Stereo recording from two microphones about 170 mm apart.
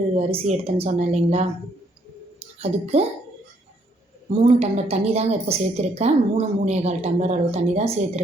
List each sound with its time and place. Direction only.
0.2 s a woman's voice: 35° right (ahead or behind)
2.6 s a woman's voice: 35° right (ahead or behind)
4.3 s a woman's voice: 40° right (ahead or behind)